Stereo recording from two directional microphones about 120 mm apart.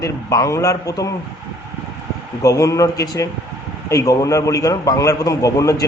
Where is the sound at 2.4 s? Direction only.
25° left (ahead or behind).